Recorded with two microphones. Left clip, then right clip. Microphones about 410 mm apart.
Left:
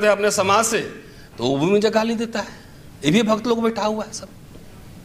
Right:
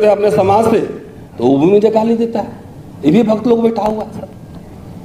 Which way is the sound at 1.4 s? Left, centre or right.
Left.